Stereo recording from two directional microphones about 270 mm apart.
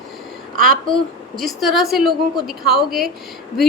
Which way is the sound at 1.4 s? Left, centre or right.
Centre.